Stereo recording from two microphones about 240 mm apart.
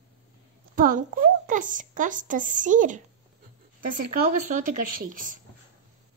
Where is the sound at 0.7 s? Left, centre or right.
Right.